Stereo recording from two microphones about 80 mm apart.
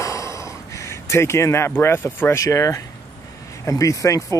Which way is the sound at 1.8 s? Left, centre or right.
Left.